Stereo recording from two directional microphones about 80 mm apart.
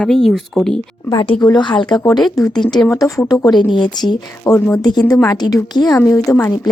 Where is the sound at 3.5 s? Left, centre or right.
Left.